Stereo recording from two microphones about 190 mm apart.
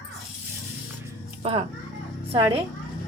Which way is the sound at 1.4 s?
30° right (ahead or behind).